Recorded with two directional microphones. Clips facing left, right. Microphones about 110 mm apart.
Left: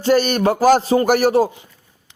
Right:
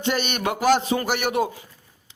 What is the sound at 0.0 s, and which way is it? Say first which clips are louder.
A man's voice: left 9 dB; 40° left (ahead or behind).